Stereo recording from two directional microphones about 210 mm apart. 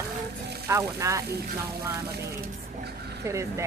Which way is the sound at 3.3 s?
15° right (ahead or behind).